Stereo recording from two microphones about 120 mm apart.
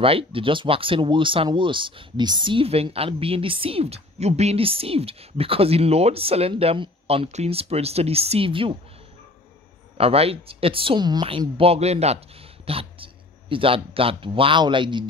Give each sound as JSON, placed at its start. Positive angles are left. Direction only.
{"t": 0.0, "sound": "speech", "side_deg": -50}
{"t": 7.2, "sound": "speech", "side_deg": -65}
{"t": 9.9, "sound": "speech", "side_deg": -55}
{"t": 12.6, "sound": "speech", "side_deg": -50}